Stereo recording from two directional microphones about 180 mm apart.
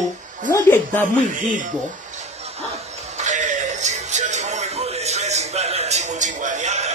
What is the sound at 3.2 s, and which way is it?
Music, 40° right (ahead or behind).